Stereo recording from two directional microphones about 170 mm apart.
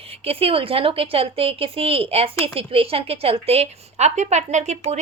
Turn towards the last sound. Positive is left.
turn(degrees=-40)  # may be behind; listen again after turning